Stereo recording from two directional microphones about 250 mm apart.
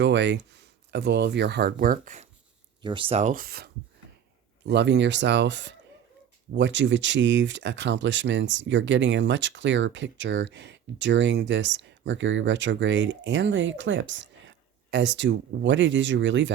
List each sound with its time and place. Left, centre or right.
0.0 s speech: right
2.8 s speech: centre; by 16.5 s right